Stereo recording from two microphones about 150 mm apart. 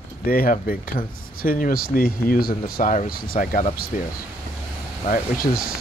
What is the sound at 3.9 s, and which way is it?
Speech, 55° left (ahead or behind).